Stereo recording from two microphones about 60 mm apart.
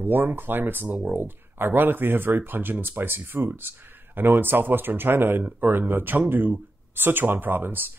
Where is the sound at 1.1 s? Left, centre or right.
Right.